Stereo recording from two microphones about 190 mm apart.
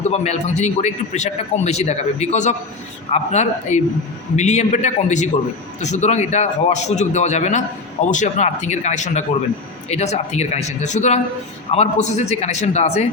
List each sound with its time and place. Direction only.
0.0 s speech: 35° left (ahead or behind)